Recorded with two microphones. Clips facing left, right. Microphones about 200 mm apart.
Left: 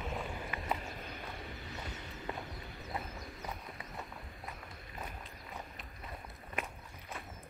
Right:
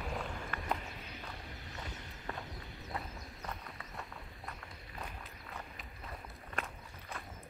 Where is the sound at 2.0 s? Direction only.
20° right (ahead or behind).